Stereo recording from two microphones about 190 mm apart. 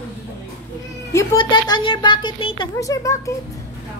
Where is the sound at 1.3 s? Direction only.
25° left (ahead or behind).